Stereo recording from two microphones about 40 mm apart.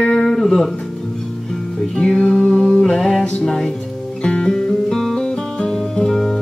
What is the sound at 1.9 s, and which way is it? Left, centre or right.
Music, centre.